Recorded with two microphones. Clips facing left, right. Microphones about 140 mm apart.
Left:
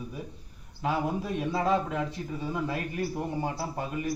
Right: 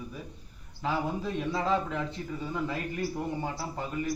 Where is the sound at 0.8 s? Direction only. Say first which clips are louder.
Left 2 dB; 10° left (ahead or behind).